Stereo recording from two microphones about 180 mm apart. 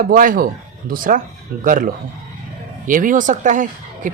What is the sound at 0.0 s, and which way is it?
Speech, 50° right (ahead or behind).